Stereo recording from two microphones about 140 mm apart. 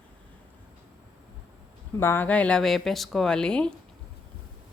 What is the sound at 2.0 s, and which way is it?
Speech, 15° left (ahead or behind).